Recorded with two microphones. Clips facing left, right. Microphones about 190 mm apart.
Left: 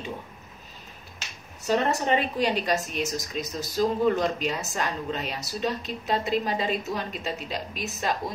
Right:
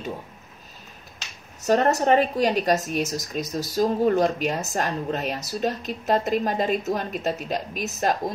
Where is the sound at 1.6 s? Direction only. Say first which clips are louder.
Right 5 dB; 45° right (ahead or behind).